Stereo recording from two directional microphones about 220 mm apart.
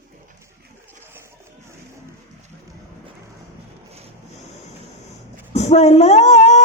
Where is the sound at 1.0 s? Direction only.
10° right (ahead or behind).